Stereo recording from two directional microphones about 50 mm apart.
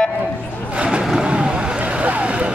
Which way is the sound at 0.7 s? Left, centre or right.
Right.